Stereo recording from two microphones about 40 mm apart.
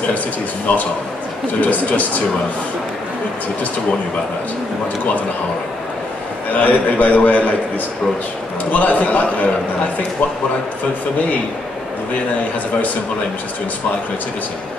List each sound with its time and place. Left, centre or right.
0.7 s a man's voice: left
6.6 s a man's voice: left
8.7 s a man's voice: left